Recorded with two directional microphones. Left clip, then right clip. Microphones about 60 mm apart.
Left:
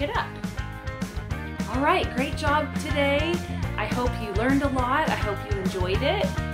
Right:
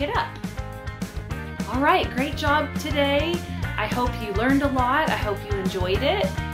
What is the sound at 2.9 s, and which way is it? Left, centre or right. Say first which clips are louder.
Music: right 1 dB; centre.